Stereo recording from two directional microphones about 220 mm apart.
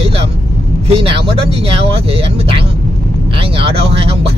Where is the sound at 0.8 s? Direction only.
25° right (ahead or behind).